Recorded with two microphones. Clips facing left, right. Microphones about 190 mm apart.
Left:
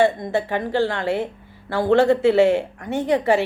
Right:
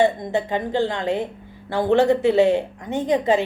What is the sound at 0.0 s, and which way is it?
Speech, 20° right (ahead or behind).